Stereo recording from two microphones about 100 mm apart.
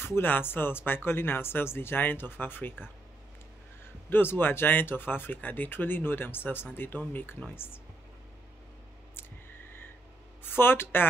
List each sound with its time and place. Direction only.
0.0 s speech: 20° left (ahead or behind)
10.4 s speech: 20° left (ahead or behind)